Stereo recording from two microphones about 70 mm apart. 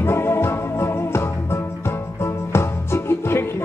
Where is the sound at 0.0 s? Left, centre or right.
Left.